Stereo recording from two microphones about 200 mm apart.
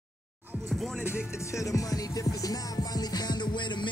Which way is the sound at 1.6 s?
15° left (ahead or behind).